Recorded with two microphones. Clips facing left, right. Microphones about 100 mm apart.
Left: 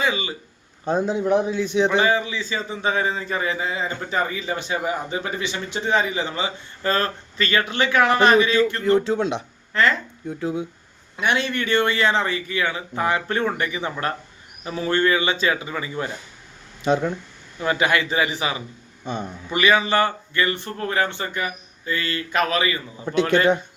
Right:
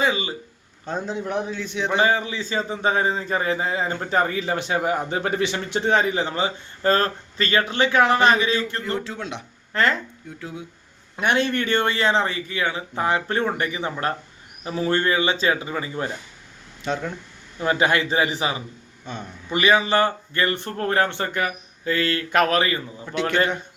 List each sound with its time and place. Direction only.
0.0 s speech: 35° right (ahead or behind)
0.9 s a man's voice: 10° left (ahead or behind)
2.0 s a man's voice: 40° right (ahead or behind); by 4.8 s 70° right (ahead or behind)
4.9 s a man's voice: 60° right (ahead or behind); by 8.8 s 30° right (ahead or behind)
8.8 s speech: 25° left (ahead or behind)
9.7 s a man's voice: 45° right (ahead or behind)
10.2 s speech: 25° left (ahead or behind)
11.2 s a man's voice: 50° right (ahead or behind); by 16.0 s 30° right (ahead or behind)
16.8 s a man's voice: 15° left (ahead or behind)
17.6 s a man's voice: 35° right (ahead or behind)
19.0 s a man's voice: 15° left (ahead or behind)
19.5 s a man's voice: 30° right (ahead or behind); by 22.8 s 50° right (ahead or behind)
23.1 s speech: 25° left (ahead or behind)